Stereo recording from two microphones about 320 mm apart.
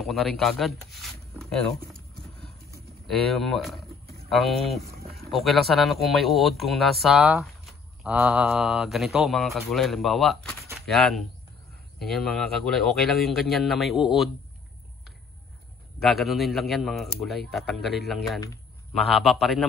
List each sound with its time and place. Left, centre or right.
0.0 s speech: centre
3.1 s speech: centre
4.8 s a sound: right
5.3 s speech: centre
16.0 s speech: centre